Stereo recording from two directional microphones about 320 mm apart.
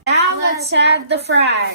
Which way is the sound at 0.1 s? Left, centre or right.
Right.